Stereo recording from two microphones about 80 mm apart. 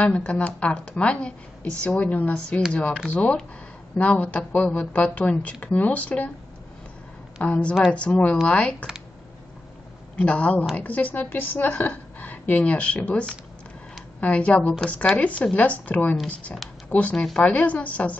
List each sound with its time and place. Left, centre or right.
0.0 s a woman's voice: centre
7.4 s a woman's voice: centre
10.1 s a woman's voice: centre
14.2 s a woman's voice: centre